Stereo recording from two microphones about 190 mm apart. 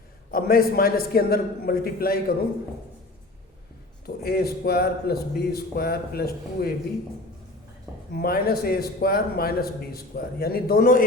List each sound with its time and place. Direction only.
0.3 s a man's voice: 50° left (ahead or behind)
4.0 s a man's voice: 55° left (ahead or behind)
8.1 s a man's voice: 55° left (ahead or behind)